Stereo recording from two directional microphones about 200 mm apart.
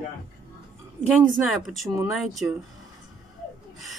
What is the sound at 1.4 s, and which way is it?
Speech, centre (ahead or behind).